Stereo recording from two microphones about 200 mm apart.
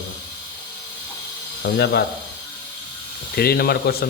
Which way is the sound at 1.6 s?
55° left (ahead or behind).